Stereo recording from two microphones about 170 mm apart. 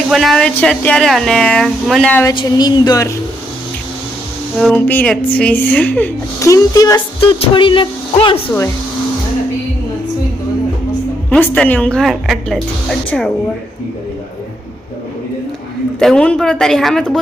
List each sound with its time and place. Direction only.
0.1 s speech: centre (ahead or behind)
2.2 s speech: 25° left (ahead or behind)
4.5 s a woman's voice: centre (ahead or behind); by 8.4 s 30° left (ahead or behind)
8.4 s a woman's voice: 15° left (ahead or behind)
11.3 s speech: 10° left (ahead or behind)
16.0 s speech: 5° left (ahead or behind)